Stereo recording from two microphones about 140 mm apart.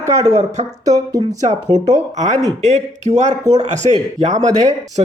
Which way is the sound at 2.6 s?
55° right (ahead or behind).